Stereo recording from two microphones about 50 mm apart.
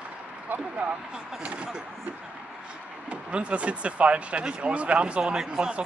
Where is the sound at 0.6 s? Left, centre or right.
Right.